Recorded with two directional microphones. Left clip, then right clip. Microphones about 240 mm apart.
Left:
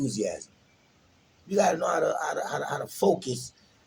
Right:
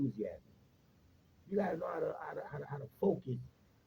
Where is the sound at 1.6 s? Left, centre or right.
Centre.